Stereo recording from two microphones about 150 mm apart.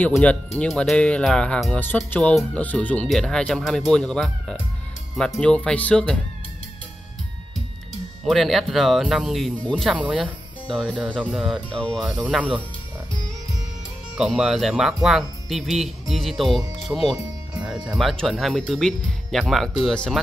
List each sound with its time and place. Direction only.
0.0 s speech: 10° left (ahead or behind)
8.3 s speech: centre (ahead or behind)
9.8 s speech: 10° right (ahead or behind)
14.1 s speech: 5° right (ahead or behind)